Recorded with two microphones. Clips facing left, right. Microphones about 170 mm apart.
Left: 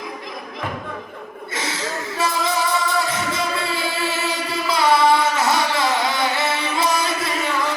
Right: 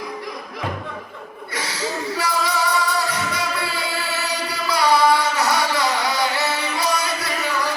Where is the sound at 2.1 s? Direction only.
25° left (ahead or behind).